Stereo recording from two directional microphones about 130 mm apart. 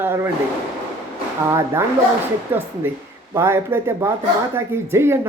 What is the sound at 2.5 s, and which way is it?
Speech, 15° right (ahead or behind).